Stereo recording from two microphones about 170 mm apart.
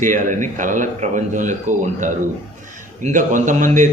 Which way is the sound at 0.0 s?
50° right (ahead or behind).